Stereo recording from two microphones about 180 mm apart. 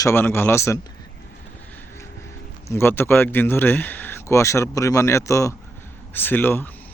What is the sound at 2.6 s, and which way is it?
Speech, 10° left (ahead or behind).